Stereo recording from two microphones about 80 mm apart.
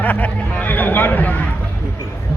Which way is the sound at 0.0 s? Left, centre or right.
Centre.